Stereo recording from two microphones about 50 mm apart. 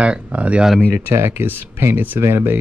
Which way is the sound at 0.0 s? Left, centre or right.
Right.